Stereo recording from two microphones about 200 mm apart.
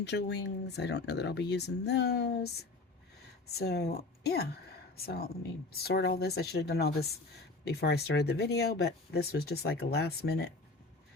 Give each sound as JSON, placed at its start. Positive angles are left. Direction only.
{"t": 0.0, "sound": "speech", "side_deg": 60}
{"t": 3.5, "sound": "speech", "side_deg": 55}